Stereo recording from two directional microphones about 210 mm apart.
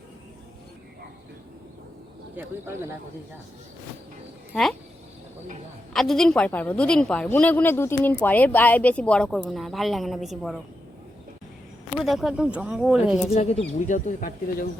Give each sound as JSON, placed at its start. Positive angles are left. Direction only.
{"t": 2.3, "sound": "speech", "side_deg": -10}
{"t": 5.9, "sound": "a woman's voice", "side_deg": 0}
{"t": 11.9, "sound": "a woman's voice", "side_deg": 0}
{"t": 13.3, "sound": "speech", "side_deg": 30}